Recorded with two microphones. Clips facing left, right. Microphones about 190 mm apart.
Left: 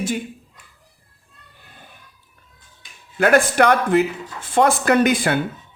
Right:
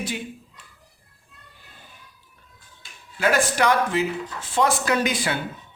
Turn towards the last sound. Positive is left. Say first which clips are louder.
# left 7 dB
turn(degrees=55)  # may be behind; listen again after turning